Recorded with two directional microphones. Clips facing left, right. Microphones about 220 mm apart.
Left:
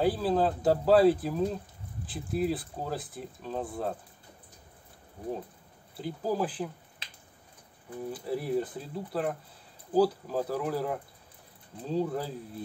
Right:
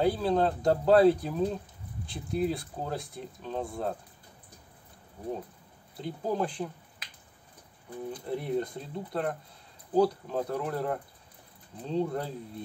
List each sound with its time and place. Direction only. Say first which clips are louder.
0.0 s speech: even; 5° left (ahead or behind)
5.9 s speech: even; 5° left (ahead or behind)
7.0 s a sound: left 1 dB; 25° left (ahead or behind)
8.1 s speech: left 1 dB; 5° left (ahead or behind)